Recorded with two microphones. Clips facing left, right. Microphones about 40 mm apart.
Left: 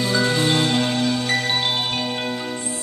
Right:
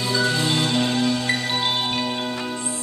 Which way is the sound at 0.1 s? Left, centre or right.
Left.